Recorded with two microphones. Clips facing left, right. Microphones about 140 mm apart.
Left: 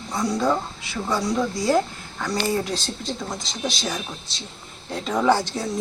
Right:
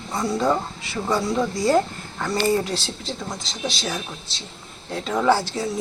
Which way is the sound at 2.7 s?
5° right (ahead or behind).